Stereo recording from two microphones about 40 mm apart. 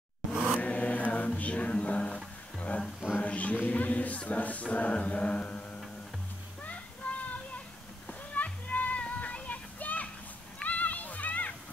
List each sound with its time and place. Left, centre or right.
0.3 s a sound: right
0.6 s mantra: left
1.4 s music: left
3.2 s music: left
4.3 s a sound: left
4.7 s mantra: left
6.6 s children playing: left
8.1 s music: left
9.2 s a sound: left